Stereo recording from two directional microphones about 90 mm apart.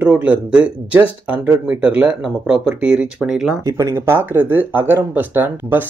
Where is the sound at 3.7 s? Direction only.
35° right (ahead or behind).